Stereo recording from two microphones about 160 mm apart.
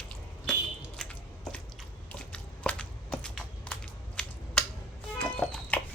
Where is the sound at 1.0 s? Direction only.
5° left (ahead or behind).